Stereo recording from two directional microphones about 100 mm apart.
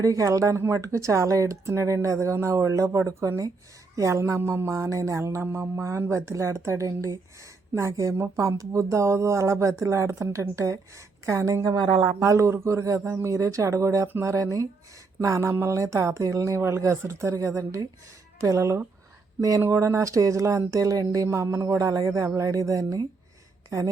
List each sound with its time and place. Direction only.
0.0 s speech: 35° right (ahead or behind)
3.9 s music: 30° right (ahead or behind)
7.8 s speech: 30° right (ahead or behind)